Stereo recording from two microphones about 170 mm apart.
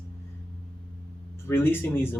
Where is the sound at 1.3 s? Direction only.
15° left (ahead or behind).